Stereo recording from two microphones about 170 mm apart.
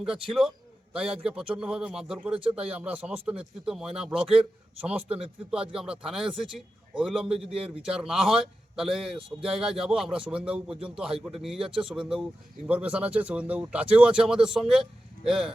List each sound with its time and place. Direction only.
0.0 s a man's voice: 5° right (ahead or behind)
9.0 s speech: 35° right (ahead or behind)
9.5 s a man's voice: 5° right (ahead or behind)